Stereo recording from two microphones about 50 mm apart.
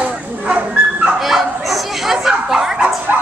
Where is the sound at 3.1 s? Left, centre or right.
Right.